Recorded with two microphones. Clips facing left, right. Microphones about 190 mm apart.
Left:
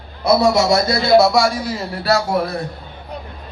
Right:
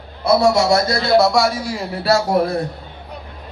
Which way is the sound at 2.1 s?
35° right (ahead or behind).